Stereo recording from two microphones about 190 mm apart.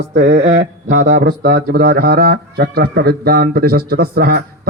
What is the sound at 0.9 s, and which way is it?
A man's voice, 45° right (ahead or behind).